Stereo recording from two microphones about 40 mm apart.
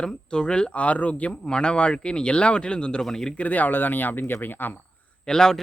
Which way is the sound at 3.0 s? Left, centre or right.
Centre.